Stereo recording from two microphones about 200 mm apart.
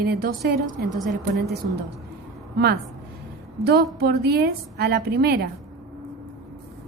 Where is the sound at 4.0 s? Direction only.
55° right (ahead or behind).